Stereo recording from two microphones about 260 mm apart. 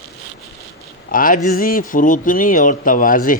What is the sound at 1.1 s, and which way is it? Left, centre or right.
A man's voice, left.